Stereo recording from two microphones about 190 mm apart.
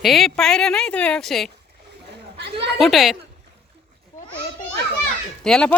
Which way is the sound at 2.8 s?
Centre (ahead or behind).